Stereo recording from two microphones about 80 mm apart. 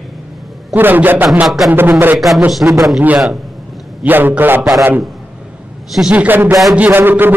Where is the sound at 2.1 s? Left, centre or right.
Centre.